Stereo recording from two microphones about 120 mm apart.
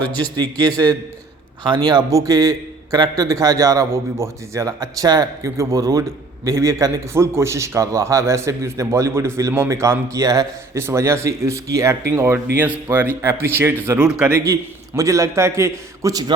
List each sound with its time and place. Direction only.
0.6 s a man's voice: 35° right (ahead or behind)
14.0 s a man's voice: 10° right (ahead or behind)
14.4 s a man's voice: 25° right (ahead or behind)